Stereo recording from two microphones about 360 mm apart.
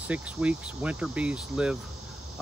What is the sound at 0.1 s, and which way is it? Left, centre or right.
Cricket, centre.